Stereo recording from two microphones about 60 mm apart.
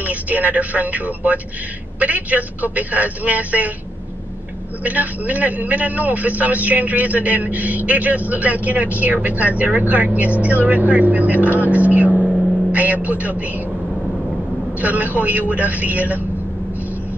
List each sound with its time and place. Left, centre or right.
0.0 s a man's voice: right
4.8 s a man's voice: right
14.8 s a man's voice: right